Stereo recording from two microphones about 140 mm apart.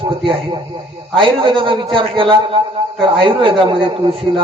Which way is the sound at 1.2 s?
40° right (ahead or behind).